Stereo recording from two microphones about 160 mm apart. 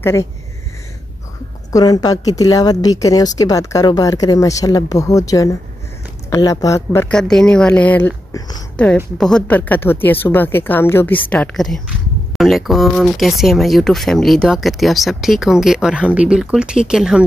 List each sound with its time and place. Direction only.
0.0 s speech: 15° left (ahead or behind)
1.7 s a woman's voice: 20° left (ahead or behind)
7.1 s speech: 5° left (ahead or behind)
8.3 s speech: 25° left (ahead or behind)
8.7 s speech: 10° left (ahead or behind)